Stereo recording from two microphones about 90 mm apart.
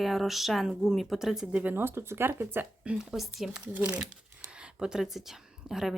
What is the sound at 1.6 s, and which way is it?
Speech, 20° right (ahead or behind).